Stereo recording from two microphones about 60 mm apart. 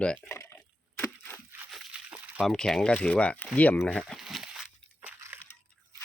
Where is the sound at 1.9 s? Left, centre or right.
Centre.